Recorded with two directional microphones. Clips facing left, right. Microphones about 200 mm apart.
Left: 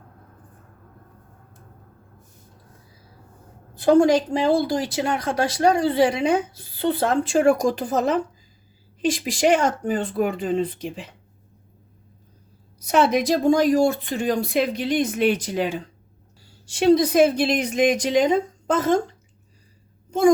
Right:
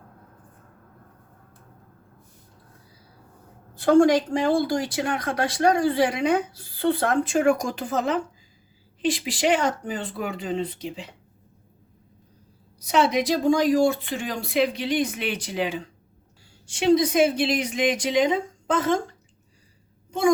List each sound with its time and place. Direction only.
3.8 s speech: 20° left (ahead or behind); by 11.1 s 50° left (ahead or behind)
12.8 s speech: 50° left (ahead or behind)
16.8 s speech: 40° left (ahead or behind)